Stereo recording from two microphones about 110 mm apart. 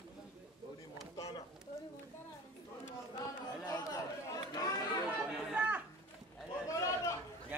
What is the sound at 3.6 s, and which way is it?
Chatter, 35° left (ahead or behind).